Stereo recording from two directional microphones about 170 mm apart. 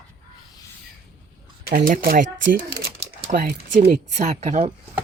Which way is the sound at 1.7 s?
55° right (ahead or behind).